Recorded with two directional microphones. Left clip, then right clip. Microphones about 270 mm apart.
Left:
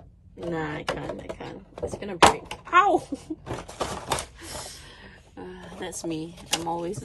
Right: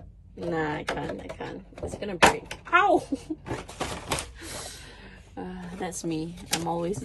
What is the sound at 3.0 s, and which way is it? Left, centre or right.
Speech, left.